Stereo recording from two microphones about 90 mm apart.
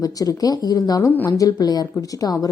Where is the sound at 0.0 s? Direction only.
45° left (ahead or behind).